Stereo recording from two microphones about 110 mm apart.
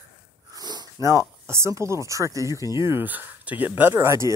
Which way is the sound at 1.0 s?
25° right (ahead or behind).